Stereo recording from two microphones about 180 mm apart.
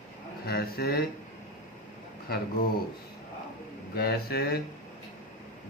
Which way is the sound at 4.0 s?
60° left (ahead or behind).